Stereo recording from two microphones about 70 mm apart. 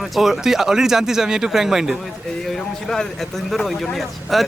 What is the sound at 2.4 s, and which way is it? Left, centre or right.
Speech, centre.